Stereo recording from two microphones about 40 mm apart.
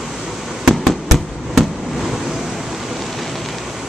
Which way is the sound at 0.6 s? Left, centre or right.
Centre.